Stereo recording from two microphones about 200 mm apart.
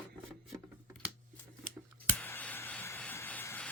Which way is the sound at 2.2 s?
10° left (ahead or behind).